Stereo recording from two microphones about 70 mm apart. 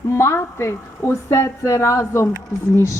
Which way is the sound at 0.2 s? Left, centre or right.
Left.